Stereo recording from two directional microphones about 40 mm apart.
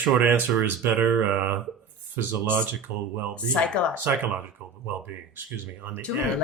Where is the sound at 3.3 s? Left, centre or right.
Left.